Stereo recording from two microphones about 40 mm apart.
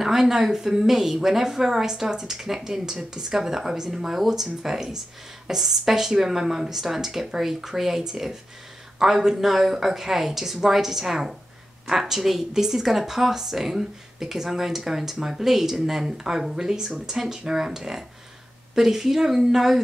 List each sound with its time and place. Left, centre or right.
0.0 s speech: centre